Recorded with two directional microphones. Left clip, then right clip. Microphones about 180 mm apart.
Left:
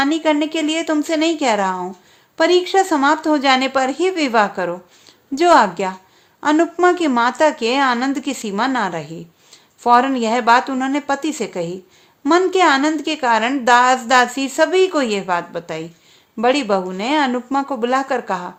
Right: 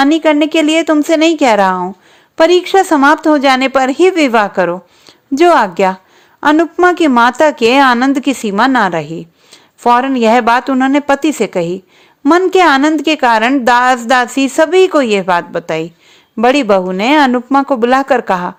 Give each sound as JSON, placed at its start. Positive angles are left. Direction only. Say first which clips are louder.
{"t": 0.0, "sound": "a woman's voice", "louder": "right 7 dB", "side_deg": -40}